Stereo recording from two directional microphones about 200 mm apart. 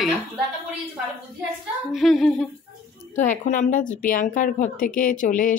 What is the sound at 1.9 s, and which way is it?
Humming, centre (ahead or behind).